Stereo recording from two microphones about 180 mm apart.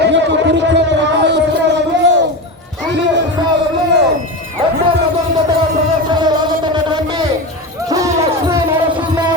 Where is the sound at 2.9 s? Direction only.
80° right.